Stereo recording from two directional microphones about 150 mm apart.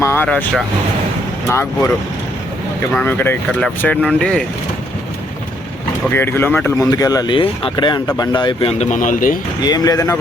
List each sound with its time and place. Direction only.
0.0 s speech: 15° left (ahead or behind)
1.5 s speech: 15° left (ahead or behind)
2.9 s speech: 10° left (ahead or behind)
6.1 s speech: 15° left (ahead or behind)
6.9 s speech: 25° left (ahead or behind)
8.8 s speech: 60° left (ahead or behind)
9.6 s speech: 25° left (ahead or behind)